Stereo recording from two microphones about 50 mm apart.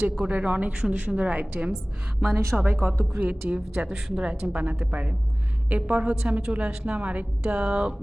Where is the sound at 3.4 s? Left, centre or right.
Right.